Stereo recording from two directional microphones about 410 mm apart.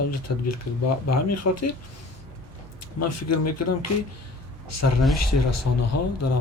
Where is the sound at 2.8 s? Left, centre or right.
Left.